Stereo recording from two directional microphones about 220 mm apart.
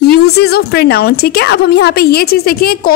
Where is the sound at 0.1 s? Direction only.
45° left (ahead or behind).